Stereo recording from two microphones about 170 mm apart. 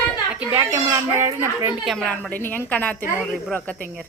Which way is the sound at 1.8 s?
Centre (ahead or behind).